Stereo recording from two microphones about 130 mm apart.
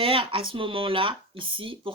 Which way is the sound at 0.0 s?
40° right (ahead or behind).